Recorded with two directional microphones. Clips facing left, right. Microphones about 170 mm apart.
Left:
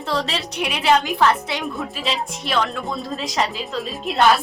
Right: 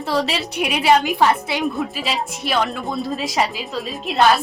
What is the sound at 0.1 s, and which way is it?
A woman's voice, 10° right (ahead or behind).